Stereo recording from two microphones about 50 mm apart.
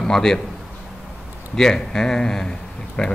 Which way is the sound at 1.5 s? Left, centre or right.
Centre.